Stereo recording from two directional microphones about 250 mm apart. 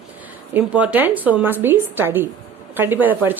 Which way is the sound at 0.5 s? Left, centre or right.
Centre.